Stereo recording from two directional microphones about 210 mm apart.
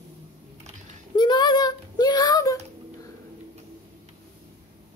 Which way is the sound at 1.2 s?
20° left (ahead or behind).